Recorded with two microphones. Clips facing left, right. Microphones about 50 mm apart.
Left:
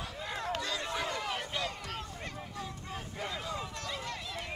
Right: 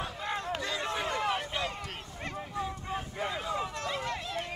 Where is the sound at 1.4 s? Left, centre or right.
Right.